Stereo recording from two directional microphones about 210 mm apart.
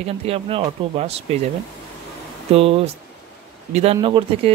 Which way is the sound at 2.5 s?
25° right (ahead or behind).